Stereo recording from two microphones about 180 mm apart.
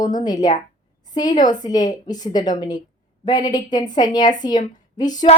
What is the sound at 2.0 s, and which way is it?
A woman's voice, 20° left (ahead or behind).